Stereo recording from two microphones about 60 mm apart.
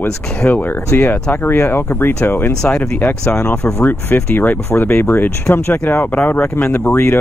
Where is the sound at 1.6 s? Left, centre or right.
Left.